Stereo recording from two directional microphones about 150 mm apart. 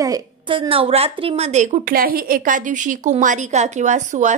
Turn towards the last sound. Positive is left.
turn(degrees=-55)  # may be behind; listen again after turning